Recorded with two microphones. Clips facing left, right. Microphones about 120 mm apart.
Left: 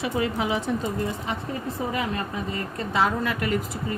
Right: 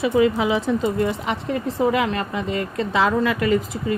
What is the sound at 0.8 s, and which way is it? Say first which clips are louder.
Speech: right 6 dB; 80° right.